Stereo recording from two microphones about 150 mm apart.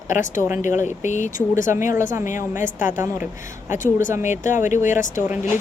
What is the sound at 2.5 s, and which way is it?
Speech, 60° left (ahead or behind).